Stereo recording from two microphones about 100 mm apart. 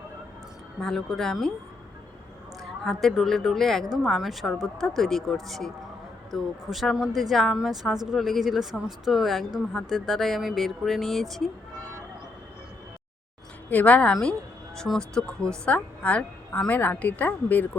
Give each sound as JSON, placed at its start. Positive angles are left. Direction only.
{"t": 0.8, "sound": "speech", "side_deg": 5}
{"t": 2.8, "sound": "speech", "side_deg": 0}
{"t": 13.7, "sound": "a woman's voice", "side_deg": 15}